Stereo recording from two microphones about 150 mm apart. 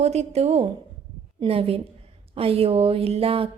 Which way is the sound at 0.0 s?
45° right (ahead or behind).